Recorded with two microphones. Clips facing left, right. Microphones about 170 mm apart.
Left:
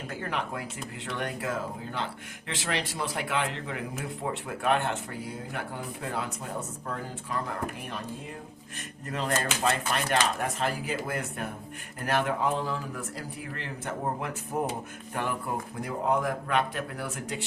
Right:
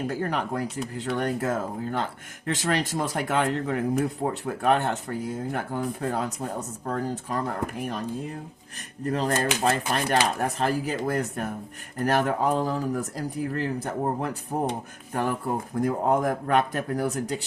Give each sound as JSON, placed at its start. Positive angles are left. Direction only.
{"t": 0.1, "sound": "a man's voice", "side_deg": -40}
{"t": 9.0, "sound": "a man's voice", "side_deg": -35}